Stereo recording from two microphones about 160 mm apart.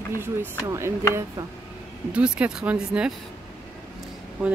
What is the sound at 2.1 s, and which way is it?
Speech, 5° right (ahead or behind).